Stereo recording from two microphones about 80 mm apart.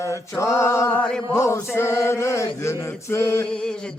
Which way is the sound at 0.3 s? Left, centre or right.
Left.